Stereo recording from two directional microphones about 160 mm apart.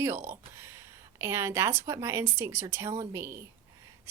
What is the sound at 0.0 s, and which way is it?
Speech, 15° right (ahead or behind).